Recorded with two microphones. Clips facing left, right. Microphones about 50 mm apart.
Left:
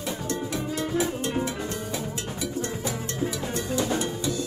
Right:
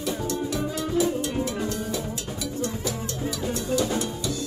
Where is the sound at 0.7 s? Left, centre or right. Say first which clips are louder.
Right 2 dB; left.